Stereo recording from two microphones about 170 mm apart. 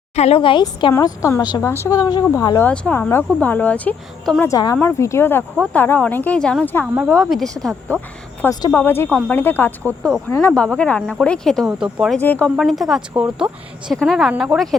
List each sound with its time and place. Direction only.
0.2 s a woman's voice: 35° left (ahead or behind)
0.9 s speech: 15° left (ahead or behind)
2.6 s speech: 10° left (ahead or behind)
4.5 s speech: 20° left (ahead or behind); by 7.9 s 5° left (ahead or behind)
8.4 s speech: 15° left (ahead or behind); by 12.2 s 5° right (ahead or behind)
12.2 s speech: 10° left (ahead or behind)
12.5 s speech: centre (ahead or behind)